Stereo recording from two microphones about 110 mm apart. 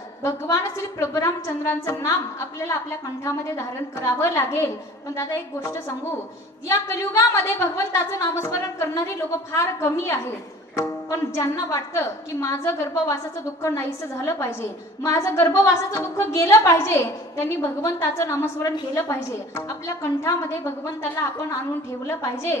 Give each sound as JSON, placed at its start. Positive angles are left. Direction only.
{"t": 0.2, "sound": "a woman's voice", "side_deg": 30}
{"t": 4.0, "sound": "a woman's voice", "side_deg": 25}
{"t": 6.7, "sound": "a woman's voice", "side_deg": 25}
{"t": 21.2, "sound": "a woman's voice", "side_deg": 30}